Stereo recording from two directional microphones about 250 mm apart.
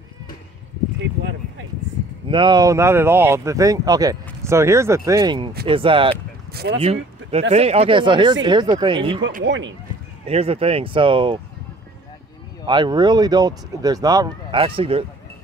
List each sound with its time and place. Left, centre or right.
2.2 s speech: centre
6.5 s speech: right
6.8 s speech: right
9.4 s speech: right
10.2 s speech: right
12.6 s speech: centre